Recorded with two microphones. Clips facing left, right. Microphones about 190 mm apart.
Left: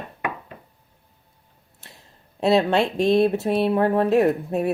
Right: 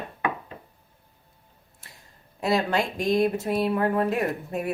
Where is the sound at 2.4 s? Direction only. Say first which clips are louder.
Left 6 dB; 25° left (ahead or behind).